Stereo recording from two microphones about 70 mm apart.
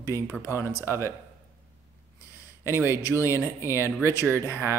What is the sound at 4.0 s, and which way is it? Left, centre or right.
Speech, right.